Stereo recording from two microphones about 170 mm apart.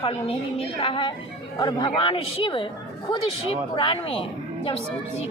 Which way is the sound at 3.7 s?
30° left (ahead or behind).